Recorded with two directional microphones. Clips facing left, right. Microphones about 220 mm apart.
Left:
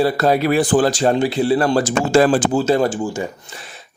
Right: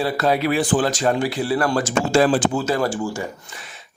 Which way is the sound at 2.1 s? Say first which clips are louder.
Left 3 dB; 45° left (ahead or behind).